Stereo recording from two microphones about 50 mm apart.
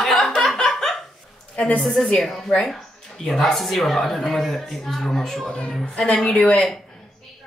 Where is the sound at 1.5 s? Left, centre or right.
Left.